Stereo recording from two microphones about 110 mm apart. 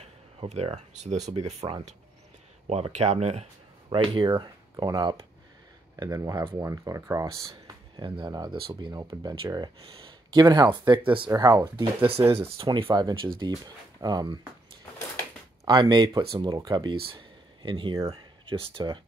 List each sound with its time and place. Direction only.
0.0 s a sound: 80° right
1.0 s speech: 90° right; by 1.8 s 65° right (ahead or behind)
2.7 s speech: 80° right
3.9 s speech: 55° right (ahead or behind); by 7.7 s 30° right (ahead or behind)
8.0 s speech: 40° right (ahead or behind)
11.3 s speech: 25° right (ahead or behind)
11.6 s speech: 50° right (ahead or behind)
15.6 s speech: 45° right (ahead or behind)